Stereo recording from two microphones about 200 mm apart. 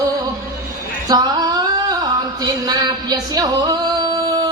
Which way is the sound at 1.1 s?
20° right (ahead or behind).